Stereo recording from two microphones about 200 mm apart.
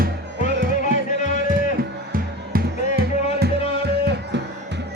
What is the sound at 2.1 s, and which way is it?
Music, 50° right (ahead or behind).